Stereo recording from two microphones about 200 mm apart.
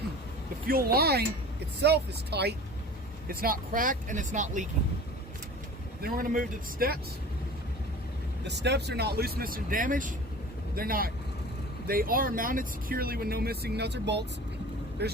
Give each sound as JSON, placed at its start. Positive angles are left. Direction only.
{"t": 0.7, "sound": "speech", "side_deg": -50}
{"t": 6.0, "sound": "speech", "side_deg": -45}
{"t": 8.4, "sound": "speech", "side_deg": -60}